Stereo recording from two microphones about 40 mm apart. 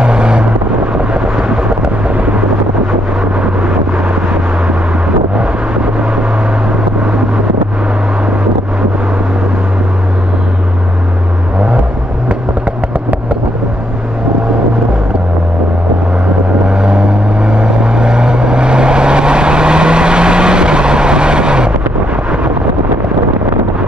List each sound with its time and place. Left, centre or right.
0.0 s vehicle: right
3.6 s vehicle: right
16.6 s vehicle: right